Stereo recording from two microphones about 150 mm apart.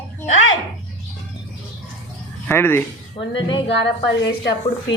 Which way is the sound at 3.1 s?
35° left (ahead or behind).